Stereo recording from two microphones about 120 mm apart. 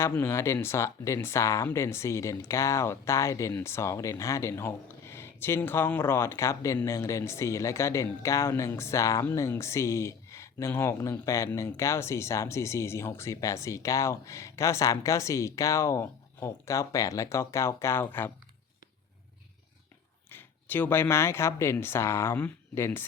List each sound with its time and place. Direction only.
0.0 s speech: 20° left (ahead or behind)
20.3 s speech: 15° left (ahead or behind)